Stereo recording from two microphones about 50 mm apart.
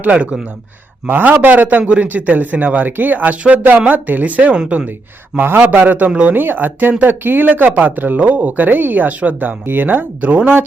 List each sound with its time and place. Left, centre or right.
0.0 s speech: right
1.0 s speech: right
5.4 s a man's voice: right
6.1 s speech: centre
6.3 s speech: right